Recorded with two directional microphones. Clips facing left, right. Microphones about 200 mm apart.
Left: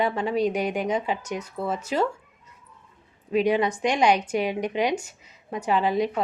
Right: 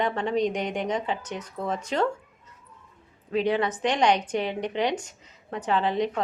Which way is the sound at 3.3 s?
15° left (ahead or behind).